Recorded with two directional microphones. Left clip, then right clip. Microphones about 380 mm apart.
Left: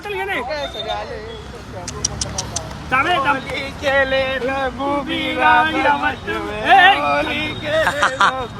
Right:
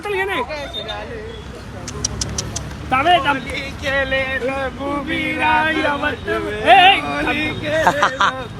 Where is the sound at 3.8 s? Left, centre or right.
Left.